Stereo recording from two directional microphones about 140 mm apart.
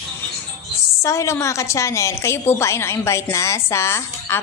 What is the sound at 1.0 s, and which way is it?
A woman's voice, 20° left (ahead or behind).